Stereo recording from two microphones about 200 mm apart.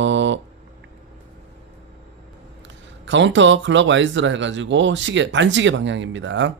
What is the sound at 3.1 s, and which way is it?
Speech, 65° right (ahead or behind).